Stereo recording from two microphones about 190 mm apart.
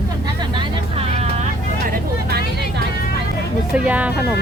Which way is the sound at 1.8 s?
50° right (ahead or behind).